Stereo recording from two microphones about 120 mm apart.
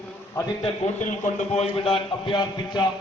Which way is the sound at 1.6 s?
50° left (ahead or behind).